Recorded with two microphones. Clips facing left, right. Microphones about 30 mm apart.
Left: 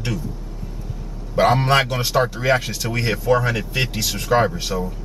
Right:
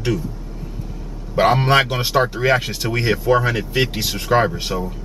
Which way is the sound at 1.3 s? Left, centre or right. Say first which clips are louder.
Right 1 dB; centre.